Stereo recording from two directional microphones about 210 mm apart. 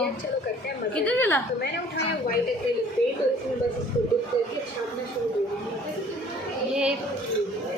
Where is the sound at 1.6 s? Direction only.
50° left (ahead or behind).